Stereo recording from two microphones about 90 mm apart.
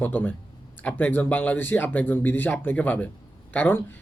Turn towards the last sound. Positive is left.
turn(degrees=20)  # may be behind; listen again after turning